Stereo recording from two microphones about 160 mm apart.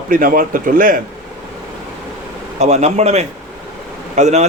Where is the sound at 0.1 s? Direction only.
60° right (ahead or behind).